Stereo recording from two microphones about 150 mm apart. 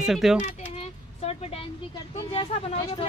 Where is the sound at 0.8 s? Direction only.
40° left (ahead or behind).